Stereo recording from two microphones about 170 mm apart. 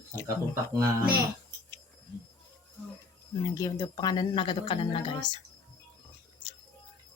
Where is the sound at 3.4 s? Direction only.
20° left (ahead or behind).